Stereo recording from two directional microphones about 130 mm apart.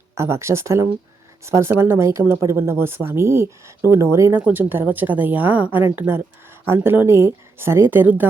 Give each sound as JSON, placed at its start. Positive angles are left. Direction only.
{"t": 0.2, "sound": "speech", "side_deg": -20}